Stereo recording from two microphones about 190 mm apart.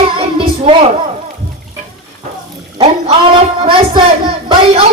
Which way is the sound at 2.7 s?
35° right (ahead or behind).